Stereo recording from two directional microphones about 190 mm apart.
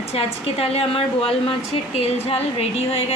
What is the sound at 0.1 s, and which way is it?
A woman's voice, 30° left (ahead or behind).